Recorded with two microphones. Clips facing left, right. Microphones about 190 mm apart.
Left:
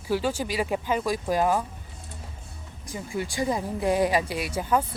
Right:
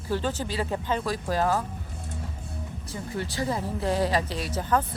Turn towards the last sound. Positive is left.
turn(degrees=10)  # may be behind; listen again after turning